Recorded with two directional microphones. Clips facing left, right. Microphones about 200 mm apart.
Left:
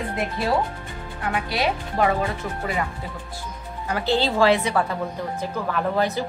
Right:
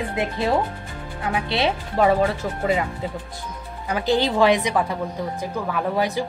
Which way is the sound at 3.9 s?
15° right (ahead or behind).